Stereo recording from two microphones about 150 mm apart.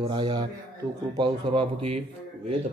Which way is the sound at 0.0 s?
30° right (ahead or behind).